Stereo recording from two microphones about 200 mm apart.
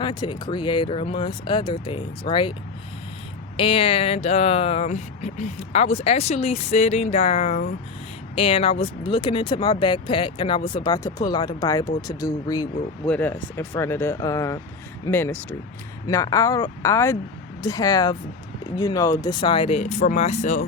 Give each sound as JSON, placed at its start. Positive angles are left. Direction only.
{"t": 0.0, "sound": "speech", "side_deg": 20}
{"t": 3.6, "sound": "speech", "side_deg": 30}
{"t": 13.1, "sound": "speech", "side_deg": 10}